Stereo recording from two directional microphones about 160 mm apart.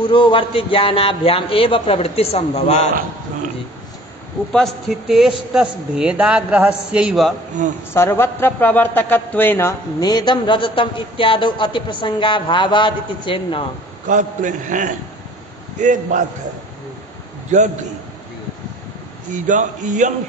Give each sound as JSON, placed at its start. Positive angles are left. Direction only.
{"t": 0.0, "sound": "a man's voice", "side_deg": 30}
{"t": 4.5, "sound": "a man's voice", "side_deg": 0}
{"t": 7.6, "sound": "a man's voice", "side_deg": -50}
{"t": 7.9, "sound": "a man's voice", "side_deg": 15}
{"t": 14.0, "sound": "a man's voice", "side_deg": -50}
{"t": 17.5, "sound": "a man's voice", "side_deg": -50}
{"t": 19.4, "sound": "a man's voice", "side_deg": -50}